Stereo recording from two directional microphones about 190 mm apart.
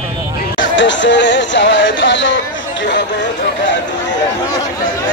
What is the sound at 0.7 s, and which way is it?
Speech, 70° left (ahead or behind).